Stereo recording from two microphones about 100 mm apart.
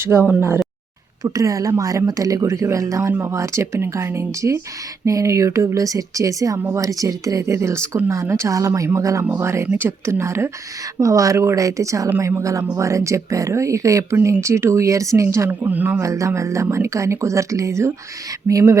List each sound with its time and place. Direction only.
0.0 s speech: 25° right (ahead or behind)
1.2 s speech: 35° right (ahead or behind)
9.2 s speech: 20° right (ahead or behind)
16.0 s speech: 30° right (ahead or behind)